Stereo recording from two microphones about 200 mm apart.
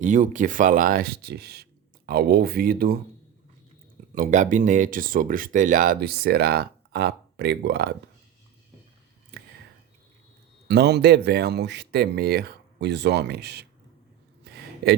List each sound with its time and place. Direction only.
0.0 s speech: 40° right (ahead or behind)
4.1 s speech: 40° right (ahead or behind); by 7.9 s 55° right (ahead or behind)
10.7 s speech: 55° right (ahead or behind)
14.4 s a sound: 55° right (ahead or behind)